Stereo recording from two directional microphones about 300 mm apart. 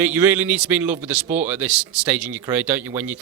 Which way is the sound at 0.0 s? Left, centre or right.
Centre.